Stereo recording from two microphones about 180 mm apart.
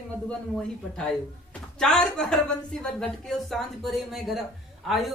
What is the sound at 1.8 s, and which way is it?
Speech, 5° left (ahead or behind).